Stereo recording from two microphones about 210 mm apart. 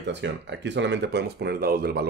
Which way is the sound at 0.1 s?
55° right (ahead or behind).